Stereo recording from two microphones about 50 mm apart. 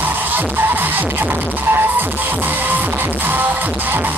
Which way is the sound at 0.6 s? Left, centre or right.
Right.